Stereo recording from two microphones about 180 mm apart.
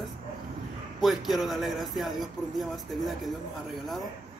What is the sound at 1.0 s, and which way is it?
Speech, centre (ahead or behind).